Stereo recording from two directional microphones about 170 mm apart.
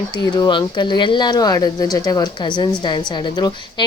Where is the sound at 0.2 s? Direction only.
25° left (ahead or behind).